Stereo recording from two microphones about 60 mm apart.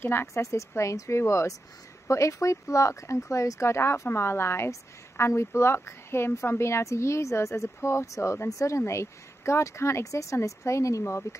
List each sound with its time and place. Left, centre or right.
0.0 s speech: left